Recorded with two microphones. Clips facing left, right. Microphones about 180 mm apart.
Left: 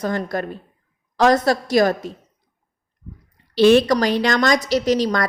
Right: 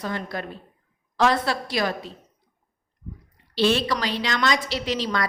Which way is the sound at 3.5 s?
50° left (ahead or behind).